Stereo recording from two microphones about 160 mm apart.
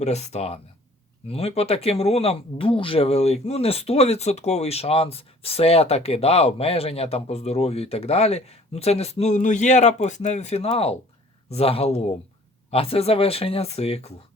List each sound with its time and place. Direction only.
0.0 s speech: 45° left (ahead or behind)